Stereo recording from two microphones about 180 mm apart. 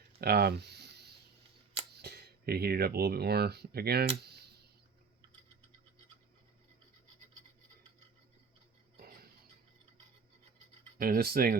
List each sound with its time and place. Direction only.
0.2 s speech: 60° right (ahead or behind)
10.9 s speech: 55° right (ahead or behind)